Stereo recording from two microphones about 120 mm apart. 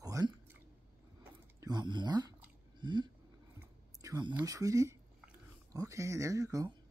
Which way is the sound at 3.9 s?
35° right (ahead or behind).